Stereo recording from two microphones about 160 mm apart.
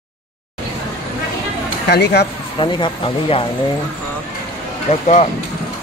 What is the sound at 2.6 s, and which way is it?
Speech, 30° left (ahead or behind).